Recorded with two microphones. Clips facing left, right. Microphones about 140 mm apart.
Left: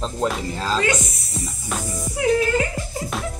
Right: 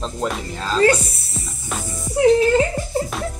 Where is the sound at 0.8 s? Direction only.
35° right (ahead or behind).